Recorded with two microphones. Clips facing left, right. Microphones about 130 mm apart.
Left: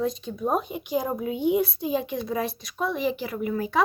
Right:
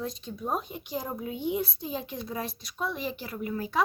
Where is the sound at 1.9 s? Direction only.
80° left.